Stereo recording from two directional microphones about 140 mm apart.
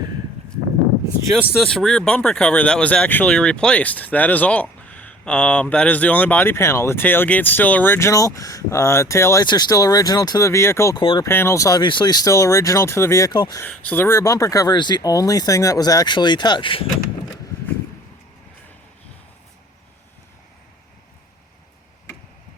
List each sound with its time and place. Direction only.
1.5 s speech: 5° left (ahead or behind); by 10.9 s 20° left (ahead or behind)
10.9 s speech: 40° left (ahead or behind)
11.2 s speech: 15° left (ahead or behind)
13.6 s speech: 15° left (ahead or behind); by 16.8 s 35° left (ahead or behind)